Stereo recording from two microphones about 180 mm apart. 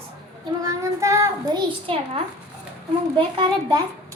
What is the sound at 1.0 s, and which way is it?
A child's voice, 15° right (ahead or behind).